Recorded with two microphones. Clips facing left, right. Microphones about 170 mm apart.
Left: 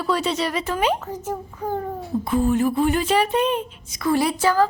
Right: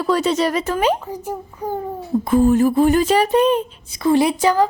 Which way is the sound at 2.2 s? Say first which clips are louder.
Right 6 dB; 45° right (ahead or behind).